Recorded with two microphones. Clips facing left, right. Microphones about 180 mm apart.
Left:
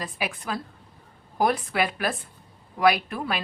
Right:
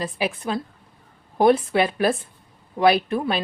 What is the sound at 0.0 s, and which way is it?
A woman's voice, 25° right (ahead or behind).